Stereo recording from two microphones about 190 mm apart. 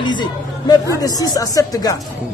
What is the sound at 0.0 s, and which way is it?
A woman's voice, 25° left (ahead or behind).